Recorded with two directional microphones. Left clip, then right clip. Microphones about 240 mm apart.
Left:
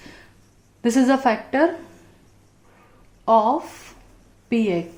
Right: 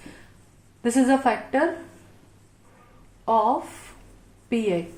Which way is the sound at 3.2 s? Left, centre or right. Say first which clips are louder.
Left 4 dB; left.